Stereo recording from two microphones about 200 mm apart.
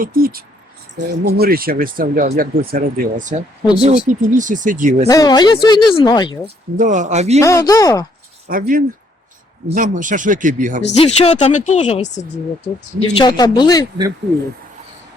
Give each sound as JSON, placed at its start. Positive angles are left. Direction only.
{"t": 0.0, "sound": "speech", "side_deg": -45}
{"t": 5.0, "sound": "speech", "side_deg": 20}
{"t": 6.7, "sound": "speech", "side_deg": -40}
{"t": 7.4, "sound": "speech", "side_deg": 15}
{"t": 8.4, "sound": "speech", "side_deg": -45}
{"t": 10.9, "sound": "speech", "side_deg": 30}
{"t": 13.1, "sound": "speech", "side_deg": 20}